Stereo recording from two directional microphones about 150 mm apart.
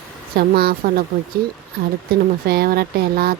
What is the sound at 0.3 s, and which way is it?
Speech, 90° right.